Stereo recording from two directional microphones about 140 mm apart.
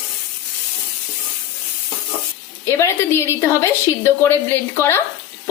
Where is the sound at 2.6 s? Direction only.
20° left (ahead or behind).